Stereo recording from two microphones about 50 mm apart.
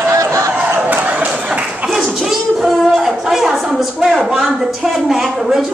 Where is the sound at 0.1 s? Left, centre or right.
Right.